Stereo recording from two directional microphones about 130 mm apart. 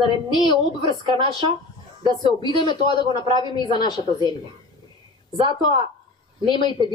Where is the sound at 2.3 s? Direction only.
35° left (ahead or behind).